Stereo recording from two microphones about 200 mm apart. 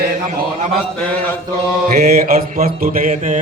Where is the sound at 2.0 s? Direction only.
45° right (ahead or behind).